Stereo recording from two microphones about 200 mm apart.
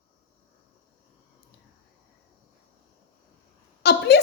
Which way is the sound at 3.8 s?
55° left (ahead or behind).